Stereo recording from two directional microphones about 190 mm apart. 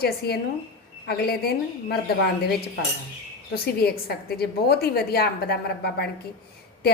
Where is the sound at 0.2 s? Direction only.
60° left (ahead or behind).